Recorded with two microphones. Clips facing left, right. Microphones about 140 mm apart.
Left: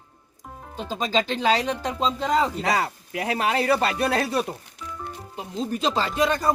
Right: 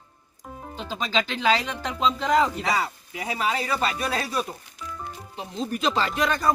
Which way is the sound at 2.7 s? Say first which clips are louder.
Left 2 dB; 70° left (ahead or behind).